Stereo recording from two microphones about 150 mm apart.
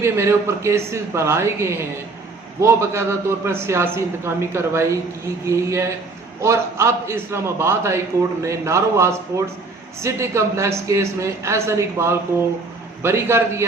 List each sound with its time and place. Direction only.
0.0 s a man's voice: 20° right (ahead or behind)